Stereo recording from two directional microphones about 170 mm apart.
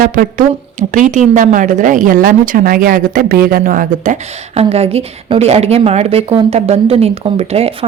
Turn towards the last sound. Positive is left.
turn(degrees=-35)  # may be behind; listen again after turning